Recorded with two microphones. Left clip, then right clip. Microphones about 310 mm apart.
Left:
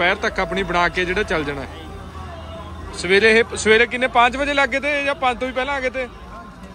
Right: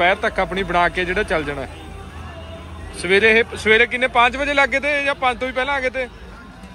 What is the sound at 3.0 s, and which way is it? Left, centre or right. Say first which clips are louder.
Speech: even; centre.